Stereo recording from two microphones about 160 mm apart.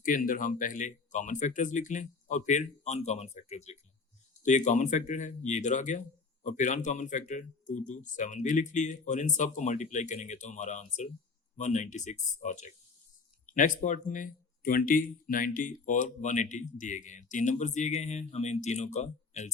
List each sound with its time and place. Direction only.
0.0 s speech: 60° left (ahead or behind)